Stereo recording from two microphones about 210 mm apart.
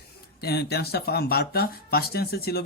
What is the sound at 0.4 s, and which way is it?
Speech, 50° left (ahead or behind).